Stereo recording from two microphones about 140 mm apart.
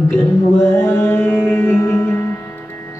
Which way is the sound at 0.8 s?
15° left (ahead or behind).